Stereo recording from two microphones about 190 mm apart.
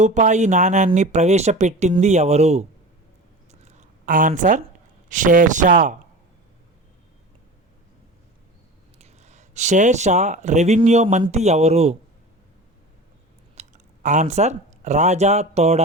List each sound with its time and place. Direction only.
0.0 s speech: 40° right (ahead or behind)
3.5 s writing: 35° right (ahead or behind)
5.0 s a man's voice: 45° right (ahead or behind)
9.0 s speech: 35° right (ahead or behind)
13.6 s speech: 40° right (ahead or behind)